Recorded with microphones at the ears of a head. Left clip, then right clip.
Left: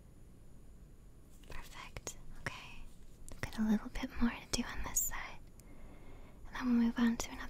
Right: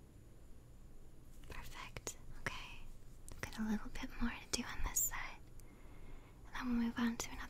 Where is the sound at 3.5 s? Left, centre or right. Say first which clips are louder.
Left 8 dB; left.